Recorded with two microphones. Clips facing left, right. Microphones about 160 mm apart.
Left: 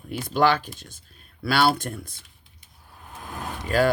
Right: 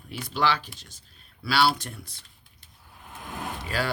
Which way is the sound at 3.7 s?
45° left (ahead or behind).